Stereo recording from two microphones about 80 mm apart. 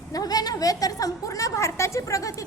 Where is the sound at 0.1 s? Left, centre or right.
Left.